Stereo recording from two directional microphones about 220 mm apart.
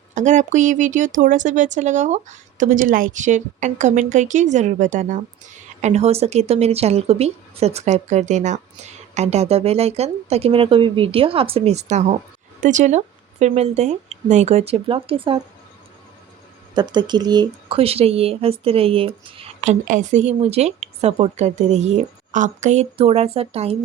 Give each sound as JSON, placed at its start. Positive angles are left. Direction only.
{"t": 0.1, "sound": "speech", "side_deg": -35}
{"t": 16.7, "sound": "speech", "side_deg": -20}